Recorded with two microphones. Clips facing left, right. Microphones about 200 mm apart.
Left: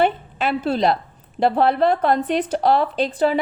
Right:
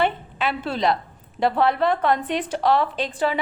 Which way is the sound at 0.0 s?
45° left (ahead or behind).